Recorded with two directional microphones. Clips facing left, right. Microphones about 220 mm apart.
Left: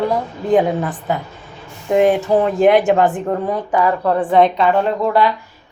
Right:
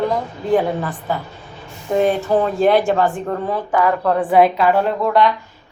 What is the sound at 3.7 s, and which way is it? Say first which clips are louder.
Speech: even; 5° left (ahead or behind).